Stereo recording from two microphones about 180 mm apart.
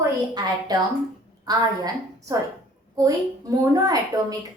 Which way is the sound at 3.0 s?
20° right (ahead or behind).